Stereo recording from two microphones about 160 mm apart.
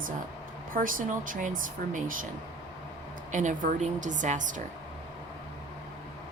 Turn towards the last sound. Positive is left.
turn(degrees=-50)  # may be behind; listen again after turning